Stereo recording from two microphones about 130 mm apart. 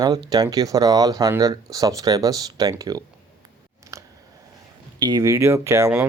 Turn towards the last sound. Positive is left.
turn(degrees=-25)  # may be behind; listen again after turning